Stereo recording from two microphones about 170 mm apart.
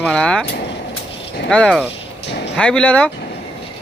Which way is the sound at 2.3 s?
90° left.